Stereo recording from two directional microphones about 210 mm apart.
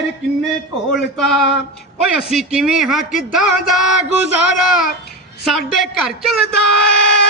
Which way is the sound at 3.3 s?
Centre (ahead or behind).